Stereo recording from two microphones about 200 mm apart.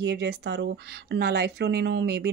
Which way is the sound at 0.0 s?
60° right (ahead or behind).